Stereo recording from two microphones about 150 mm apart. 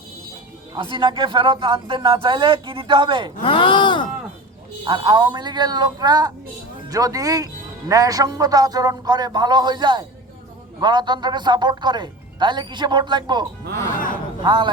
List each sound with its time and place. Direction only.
0.7 s a man's voice: 30° right (ahead or behind)
3.4 s speech: 35° left (ahead or behind)
4.9 s speech: 30° right (ahead or behind)
13.9 s speech: 65° left (ahead or behind)
14.4 s a man's voice: 30° right (ahead or behind)